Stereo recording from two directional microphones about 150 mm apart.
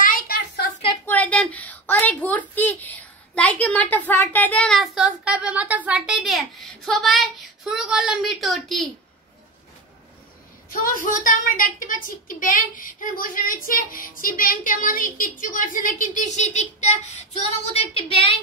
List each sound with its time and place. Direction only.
0.0 s a sound: 80° left
1.0 s a woman's voice: 10° left (ahead or behind)
10.7 s a child's voice: 65° left (ahead or behind); by 17.2 s 50° left (ahead or behind)
17.7 s a woman's voice: 35° left (ahead or behind)